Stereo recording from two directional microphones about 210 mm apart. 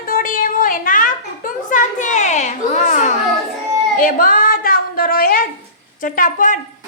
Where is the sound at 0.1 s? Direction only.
40° left (ahead or behind).